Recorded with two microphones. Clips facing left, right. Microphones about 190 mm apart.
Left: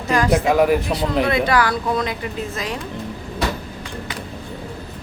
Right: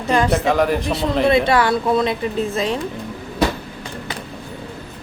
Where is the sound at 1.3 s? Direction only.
25° right (ahead or behind).